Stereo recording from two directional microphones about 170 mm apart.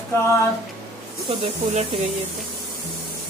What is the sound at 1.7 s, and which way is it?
Speech, 40° right (ahead or behind).